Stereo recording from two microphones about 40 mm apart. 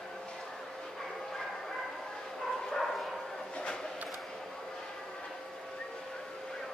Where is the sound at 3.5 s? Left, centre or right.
Left.